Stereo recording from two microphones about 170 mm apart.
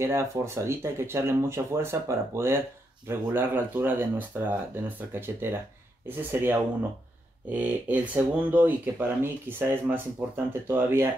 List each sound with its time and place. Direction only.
0.0 s speech: 15° right (ahead or behind)